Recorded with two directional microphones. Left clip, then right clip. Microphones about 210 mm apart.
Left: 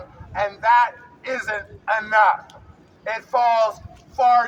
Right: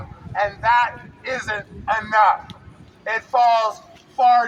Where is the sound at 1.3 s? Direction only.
10° left (ahead or behind).